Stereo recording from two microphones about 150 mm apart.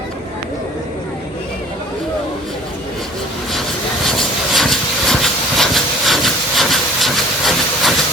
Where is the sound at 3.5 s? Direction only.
Centre (ahead or behind).